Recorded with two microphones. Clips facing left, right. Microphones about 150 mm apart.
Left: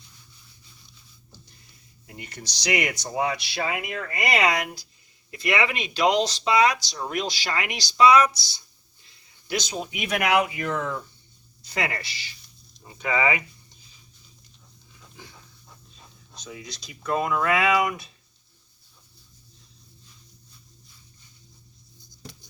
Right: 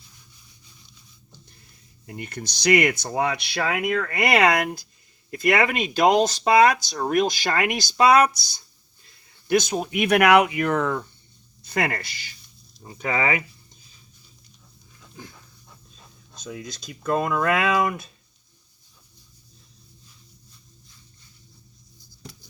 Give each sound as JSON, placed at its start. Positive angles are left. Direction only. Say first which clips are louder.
{"t": 2.0, "sound": "speech", "louder": "right 6 dB", "side_deg": -55}
{"t": 16.4, "sound": "speech", "louder": "right 4 dB", "side_deg": -50}